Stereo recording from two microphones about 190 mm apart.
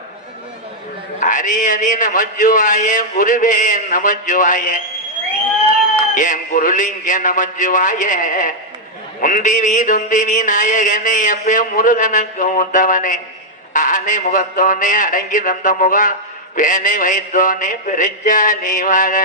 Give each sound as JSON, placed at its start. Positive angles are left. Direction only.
{"t": 1.2, "sound": "mantra", "side_deg": 40}
{"t": 6.1, "sound": "mantra", "side_deg": 40}